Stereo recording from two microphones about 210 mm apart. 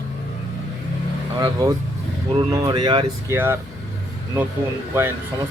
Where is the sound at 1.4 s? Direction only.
15° right (ahead or behind).